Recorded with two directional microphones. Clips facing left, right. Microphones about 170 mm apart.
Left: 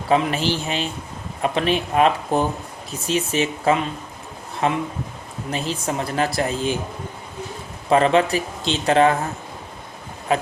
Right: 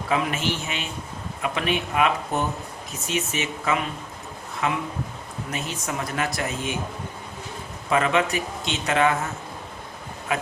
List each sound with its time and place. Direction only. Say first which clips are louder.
0.1 s speech: left 6 dB; 30° left (ahead or behind)
7.9 s speech: left 5 dB; 30° left (ahead or behind)
10.3 s speech: left 6 dB; 30° left (ahead or behind)